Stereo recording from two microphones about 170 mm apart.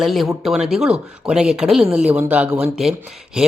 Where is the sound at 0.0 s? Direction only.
Centre (ahead or behind).